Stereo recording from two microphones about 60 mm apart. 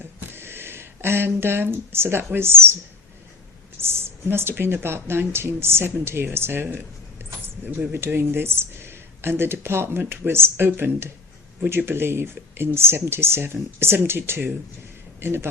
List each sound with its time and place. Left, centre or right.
0.0 s speech: right
3.8 s speech: right
7.9 s a man's voice: right